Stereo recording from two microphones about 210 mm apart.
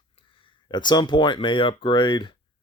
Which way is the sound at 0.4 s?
20° left (ahead or behind).